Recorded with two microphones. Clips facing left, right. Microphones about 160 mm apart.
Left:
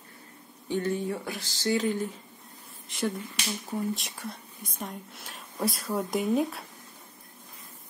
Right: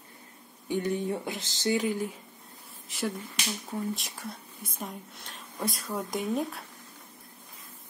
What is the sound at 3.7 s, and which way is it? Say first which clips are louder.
Speech: left 3 dB; centre (ahead or behind).